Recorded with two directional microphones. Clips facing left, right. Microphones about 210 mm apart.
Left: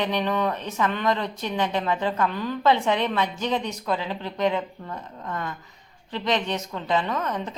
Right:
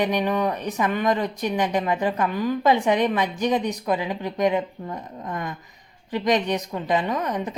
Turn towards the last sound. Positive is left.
turn(degrees=-15)  # may be behind; listen again after turning